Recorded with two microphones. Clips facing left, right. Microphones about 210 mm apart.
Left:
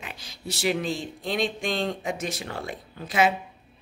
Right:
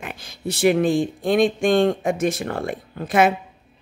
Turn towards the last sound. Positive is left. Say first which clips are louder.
# right 5 dB
turn(degrees=-55)  # may be behind; listen again after turning